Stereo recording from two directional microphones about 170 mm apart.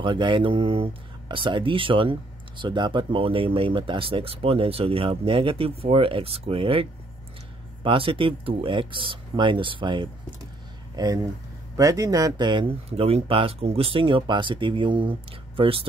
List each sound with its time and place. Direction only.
0.0 s speech: 30° right (ahead or behind)